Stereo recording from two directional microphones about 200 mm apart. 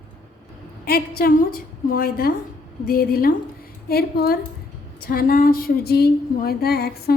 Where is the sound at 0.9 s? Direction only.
50° left (ahead or behind).